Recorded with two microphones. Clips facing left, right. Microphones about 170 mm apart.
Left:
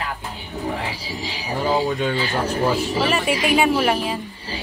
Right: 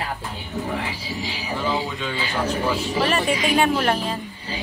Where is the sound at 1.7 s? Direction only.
50° left (ahead or behind).